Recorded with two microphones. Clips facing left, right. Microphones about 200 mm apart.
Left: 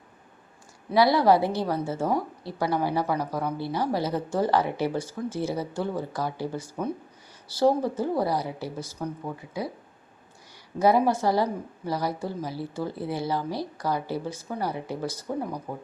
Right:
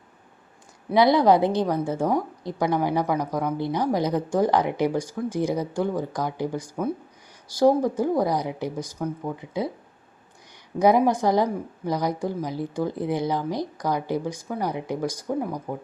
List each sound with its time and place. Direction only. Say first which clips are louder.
0.9 s a woman's voice: right 2 dB; 20° right (ahead or behind)
10.8 s a woman's voice: right 3 dB; 15° right (ahead or behind)